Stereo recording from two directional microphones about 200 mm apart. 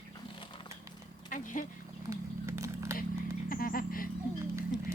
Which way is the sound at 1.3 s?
40° left (ahead or behind).